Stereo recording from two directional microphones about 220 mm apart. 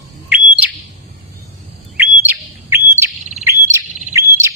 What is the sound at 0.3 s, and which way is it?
Bird, 5° right (ahead or behind).